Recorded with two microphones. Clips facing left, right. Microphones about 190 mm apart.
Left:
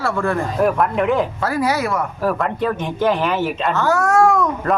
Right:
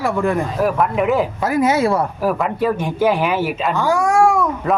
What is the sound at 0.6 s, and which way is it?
Speech, centre (ahead or behind).